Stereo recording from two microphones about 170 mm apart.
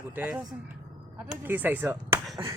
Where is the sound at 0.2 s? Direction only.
10° right (ahead or behind).